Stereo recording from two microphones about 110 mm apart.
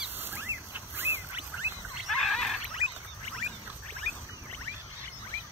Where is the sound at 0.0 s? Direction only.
20° right (ahead or behind).